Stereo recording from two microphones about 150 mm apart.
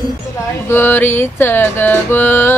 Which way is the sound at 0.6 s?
15° left (ahead or behind).